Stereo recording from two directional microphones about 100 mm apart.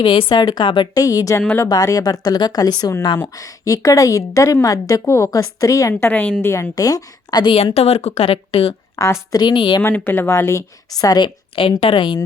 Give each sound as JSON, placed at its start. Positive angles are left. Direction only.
{"t": 0.0, "sound": "speech", "side_deg": 55}
{"t": 0.9, "sound": "a woman's voice", "side_deg": 35}
{"t": 5.9, "sound": "a woman's voice", "side_deg": 20}
{"t": 6.4, "sound": "a woman's voice", "side_deg": 30}
{"t": 7.5, "sound": "a woman's voice", "side_deg": 90}
{"t": 9.0, "sound": "a woman's voice", "side_deg": 30}
{"t": 9.3, "sound": "speech", "side_deg": 50}
{"t": 9.8, "sound": "speech", "side_deg": 20}
{"t": 10.9, "sound": "a woman's voice", "side_deg": 40}
{"t": 11.8, "sound": "a woman's voice", "side_deg": 60}